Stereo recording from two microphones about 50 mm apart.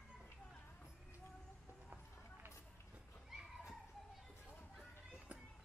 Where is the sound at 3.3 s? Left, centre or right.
Centre.